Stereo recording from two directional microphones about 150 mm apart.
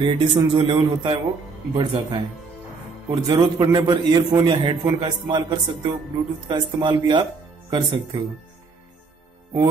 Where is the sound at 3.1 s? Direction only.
25° right (ahead or behind).